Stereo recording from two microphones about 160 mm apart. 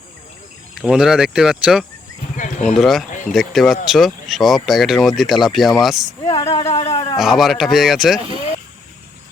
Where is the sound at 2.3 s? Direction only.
50° left (ahead or behind).